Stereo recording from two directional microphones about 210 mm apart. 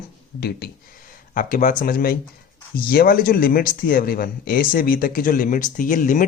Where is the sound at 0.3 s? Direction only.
50° left (ahead or behind).